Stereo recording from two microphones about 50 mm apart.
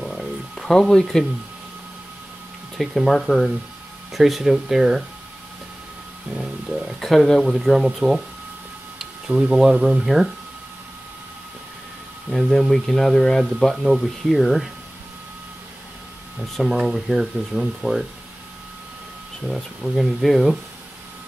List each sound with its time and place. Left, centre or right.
0.0 s music: centre
2.8 s speech: centre
7.0 s speech: centre
9.3 s speech: centre
10.0 s speech: centre
12.3 s speech: centre
16.5 s speech: centre
19.5 s speech: centre